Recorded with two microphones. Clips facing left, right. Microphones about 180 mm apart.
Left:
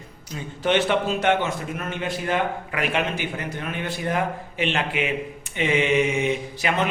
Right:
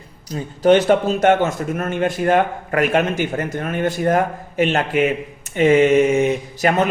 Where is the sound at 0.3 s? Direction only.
40° right (ahead or behind).